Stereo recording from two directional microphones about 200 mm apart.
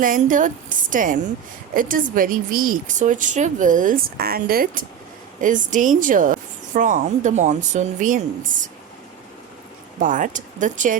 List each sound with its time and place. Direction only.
0.0 s speech: 40° right (ahead or behind)
10.0 s speech: 40° right (ahead or behind)